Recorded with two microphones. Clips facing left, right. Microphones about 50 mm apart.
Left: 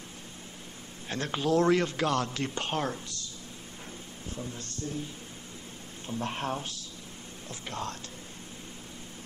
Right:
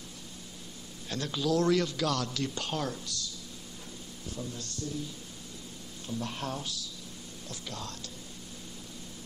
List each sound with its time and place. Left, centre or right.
1.0 s a man's voice: left
4.4 s a man's voice: left